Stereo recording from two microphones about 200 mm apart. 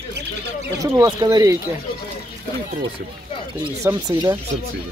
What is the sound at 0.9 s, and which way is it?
Speech, 20° right (ahead or behind).